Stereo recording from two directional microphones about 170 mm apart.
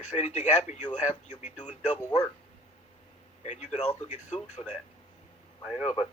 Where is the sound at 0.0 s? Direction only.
45° left (ahead or behind).